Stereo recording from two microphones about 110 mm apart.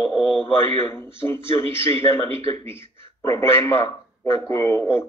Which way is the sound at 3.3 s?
25° left (ahead or behind).